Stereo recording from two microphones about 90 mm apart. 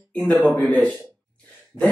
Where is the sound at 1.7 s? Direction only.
5° right (ahead or behind).